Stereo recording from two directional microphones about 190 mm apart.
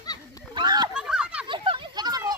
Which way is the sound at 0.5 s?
20° right (ahead or behind).